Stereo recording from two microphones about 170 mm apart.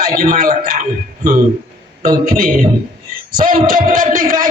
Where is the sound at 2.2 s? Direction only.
55° right (ahead or behind).